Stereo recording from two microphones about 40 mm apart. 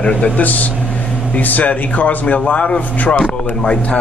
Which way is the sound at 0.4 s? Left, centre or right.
Left.